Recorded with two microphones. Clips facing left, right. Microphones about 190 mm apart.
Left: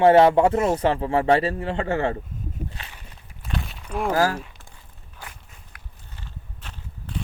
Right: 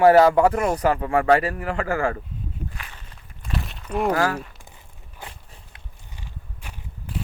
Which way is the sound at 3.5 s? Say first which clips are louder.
Right 2 dB; centre (ahead or behind).